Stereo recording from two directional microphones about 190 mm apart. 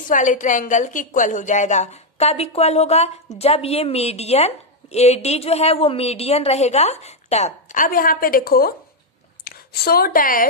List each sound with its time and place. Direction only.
0.1 s a woman's voice: 40° left (ahead or behind)